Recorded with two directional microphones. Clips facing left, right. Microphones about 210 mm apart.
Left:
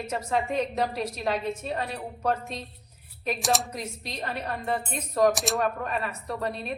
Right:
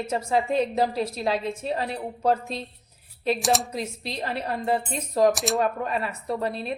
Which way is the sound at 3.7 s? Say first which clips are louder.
Right 4 dB; 30° right (ahead or behind).